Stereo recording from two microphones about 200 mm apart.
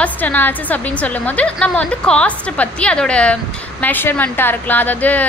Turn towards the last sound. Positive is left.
turn(degrees=5)  # may be behind; listen again after turning